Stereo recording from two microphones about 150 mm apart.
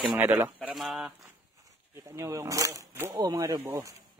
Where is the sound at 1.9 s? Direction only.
20° right (ahead or behind).